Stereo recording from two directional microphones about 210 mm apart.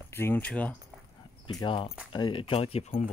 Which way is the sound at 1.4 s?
20° left (ahead or behind).